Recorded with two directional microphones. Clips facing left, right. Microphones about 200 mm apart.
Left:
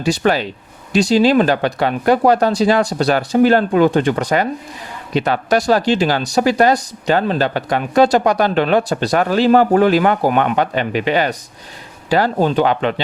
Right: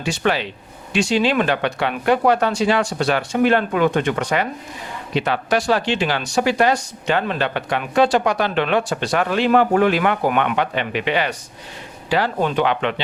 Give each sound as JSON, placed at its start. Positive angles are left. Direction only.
{"t": 0.0, "sound": "speech", "side_deg": 40}